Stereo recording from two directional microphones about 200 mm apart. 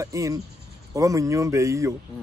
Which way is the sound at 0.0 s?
15° right (ahead or behind).